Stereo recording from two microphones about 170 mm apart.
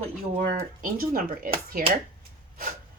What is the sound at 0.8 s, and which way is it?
Speech, 60° right (ahead or behind).